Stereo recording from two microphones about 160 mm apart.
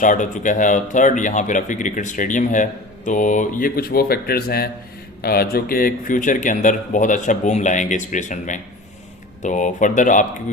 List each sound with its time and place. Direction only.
0.0 s speech: 50° left (ahead or behind)